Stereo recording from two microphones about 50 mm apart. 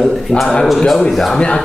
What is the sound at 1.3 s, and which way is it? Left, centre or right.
Speech, centre.